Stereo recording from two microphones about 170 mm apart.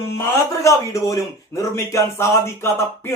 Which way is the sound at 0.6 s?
20° left (ahead or behind).